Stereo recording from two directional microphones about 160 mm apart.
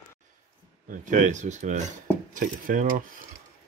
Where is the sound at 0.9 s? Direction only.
50° right (ahead or behind).